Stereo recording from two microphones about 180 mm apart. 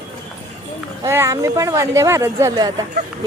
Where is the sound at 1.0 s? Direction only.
15° right (ahead or behind).